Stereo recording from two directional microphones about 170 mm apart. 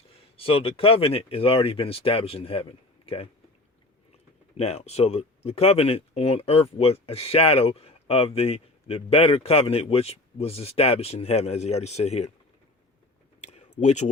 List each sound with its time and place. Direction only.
0.3 s speech: 35° left (ahead or behind)
4.5 s speech: 40° left (ahead or behind)
13.4 s a sound: 40° left (ahead or behind)